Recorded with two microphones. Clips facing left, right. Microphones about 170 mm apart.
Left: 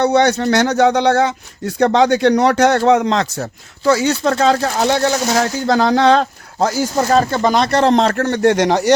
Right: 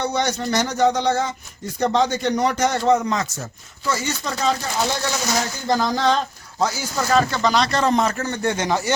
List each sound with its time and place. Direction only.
0.0 s speech: 65° left (ahead or behind)
6.9 s speech: 35° left (ahead or behind)
7.4 s speech: 50° left (ahead or behind); by 8.9 s 70° left (ahead or behind)